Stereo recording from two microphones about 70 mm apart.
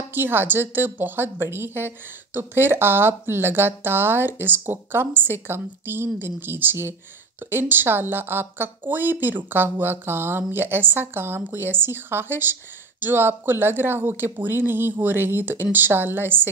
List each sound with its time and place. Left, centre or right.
0.1 s a woman's voice: right